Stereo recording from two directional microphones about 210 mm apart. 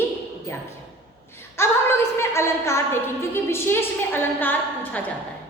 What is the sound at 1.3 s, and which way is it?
A woman's voice, 10° left (ahead or behind).